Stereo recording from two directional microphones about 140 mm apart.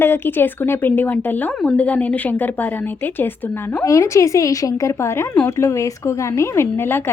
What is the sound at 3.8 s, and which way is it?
A woman's voice, 20° left (ahead or behind).